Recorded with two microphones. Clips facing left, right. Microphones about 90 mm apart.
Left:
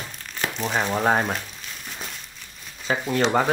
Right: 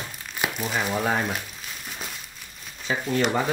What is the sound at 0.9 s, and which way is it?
Speech, 40° left (ahead or behind).